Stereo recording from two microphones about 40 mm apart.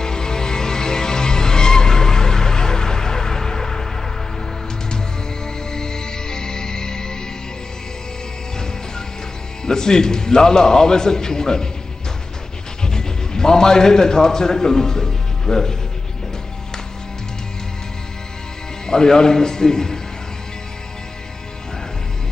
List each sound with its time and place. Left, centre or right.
0.0 s music: centre
5.7 s music: centre
9.7 s a man's voice: centre
12.8 s a man's voice: centre
18.9 s a man's voice: centre